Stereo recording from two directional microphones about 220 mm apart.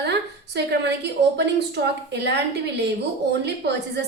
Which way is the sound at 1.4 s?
50° right (ahead or behind).